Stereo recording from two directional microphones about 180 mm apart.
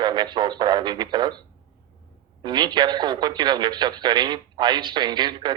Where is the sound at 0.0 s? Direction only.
25° right (ahead or behind).